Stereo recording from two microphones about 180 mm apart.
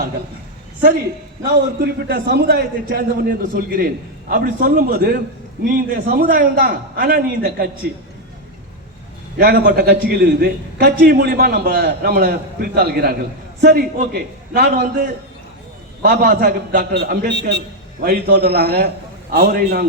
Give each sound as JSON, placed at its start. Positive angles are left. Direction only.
{"t": 1.5, "sound": "a man's voice", "side_deg": -60}
{"t": 9.4, "sound": "a man's voice", "side_deg": -60}
{"t": 16.0, "sound": "a man's voice", "side_deg": -45}
{"t": 16.4, "sound": "a man's voice", "side_deg": -65}
{"t": 18.0, "sound": "a man's voice", "side_deg": -60}